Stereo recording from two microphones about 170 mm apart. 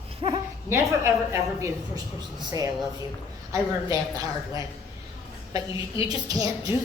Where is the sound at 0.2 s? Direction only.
25° right (ahead or behind).